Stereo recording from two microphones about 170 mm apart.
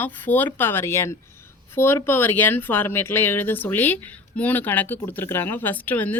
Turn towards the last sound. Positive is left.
turn(degrees=10)  # may be behind; listen again after turning